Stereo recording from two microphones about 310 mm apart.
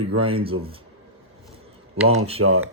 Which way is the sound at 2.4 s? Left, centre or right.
Right.